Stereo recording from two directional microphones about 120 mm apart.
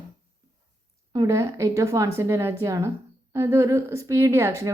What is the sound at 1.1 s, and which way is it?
Speech, 30° right (ahead or behind).